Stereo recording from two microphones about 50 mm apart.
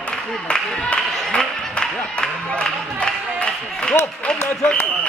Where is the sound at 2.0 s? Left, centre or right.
Centre.